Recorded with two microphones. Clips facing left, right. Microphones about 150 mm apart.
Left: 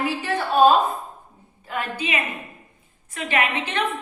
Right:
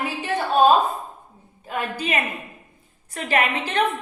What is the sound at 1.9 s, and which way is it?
A woman's voice, 40° right (ahead or behind).